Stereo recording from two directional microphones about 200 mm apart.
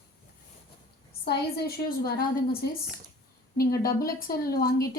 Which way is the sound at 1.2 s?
55° left (ahead or behind).